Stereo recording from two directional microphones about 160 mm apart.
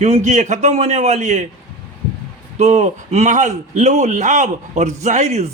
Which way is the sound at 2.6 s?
45° right (ahead or behind).